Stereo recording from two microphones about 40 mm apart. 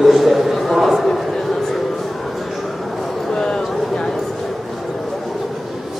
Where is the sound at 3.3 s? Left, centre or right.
Centre.